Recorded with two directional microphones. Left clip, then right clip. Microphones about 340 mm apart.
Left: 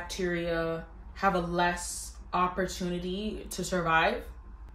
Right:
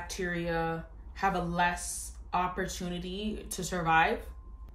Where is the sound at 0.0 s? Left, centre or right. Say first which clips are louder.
Left 2 dB; centre.